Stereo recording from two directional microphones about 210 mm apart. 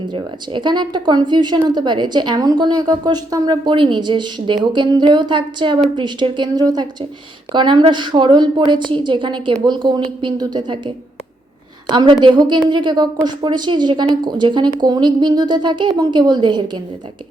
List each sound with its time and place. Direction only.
0.1 s a woman's voice: 20° right (ahead or behind)